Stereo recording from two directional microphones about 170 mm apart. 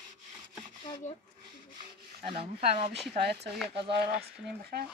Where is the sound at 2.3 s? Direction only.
40° right (ahead or behind).